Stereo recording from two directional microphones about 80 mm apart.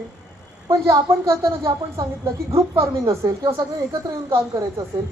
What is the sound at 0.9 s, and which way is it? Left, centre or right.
Speech, right.